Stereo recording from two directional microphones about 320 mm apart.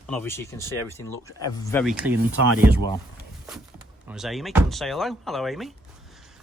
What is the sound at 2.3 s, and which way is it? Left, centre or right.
Speech, right.